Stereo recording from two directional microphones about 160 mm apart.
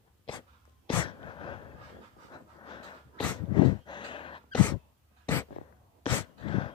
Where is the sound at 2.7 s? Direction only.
30° left (ahead or behind).